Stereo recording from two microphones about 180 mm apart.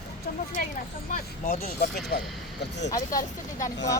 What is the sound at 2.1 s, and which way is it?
Speech, 60° left (ahead or behind).